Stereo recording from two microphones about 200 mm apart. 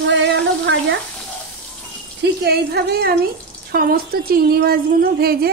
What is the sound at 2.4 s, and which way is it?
Speech, 55° right (ahead or behind).